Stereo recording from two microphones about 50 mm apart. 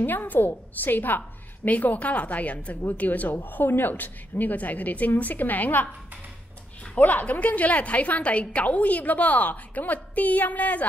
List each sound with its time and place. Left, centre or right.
0.0 s a woman's voice: left
7.0 s a woman's voice: left